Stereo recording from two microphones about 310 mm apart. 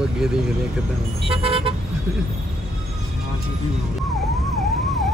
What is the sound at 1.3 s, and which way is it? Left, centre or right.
Vehicle, centre.